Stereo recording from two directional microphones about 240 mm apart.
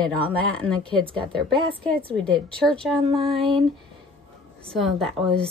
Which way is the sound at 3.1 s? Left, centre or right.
Right.